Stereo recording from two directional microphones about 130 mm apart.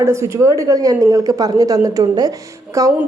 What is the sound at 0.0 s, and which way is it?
A woman's voice, 20° right (ahead or behind).